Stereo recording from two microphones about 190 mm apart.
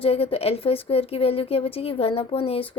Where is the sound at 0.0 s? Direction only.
30° left (ahead or behind).